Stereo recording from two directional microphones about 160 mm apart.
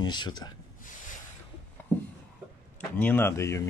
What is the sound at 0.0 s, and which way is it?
Speech, 25° left (ahead or behind).